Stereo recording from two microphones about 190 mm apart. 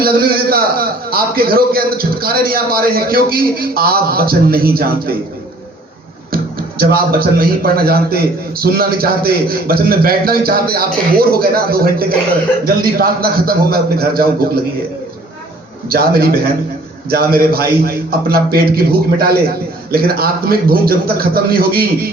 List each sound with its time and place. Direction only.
0.0 s speech: 55° right (ahead or behind)
6.3 s speech: 50° right (ahead or behind)
15.9 s speech: 50° right (ahead or behind)